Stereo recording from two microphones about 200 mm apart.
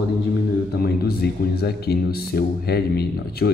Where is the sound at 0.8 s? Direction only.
50° left (ahead or behind).